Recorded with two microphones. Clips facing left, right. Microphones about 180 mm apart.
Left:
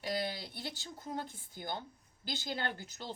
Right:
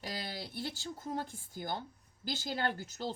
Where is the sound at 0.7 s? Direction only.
45° right (ahead or behind).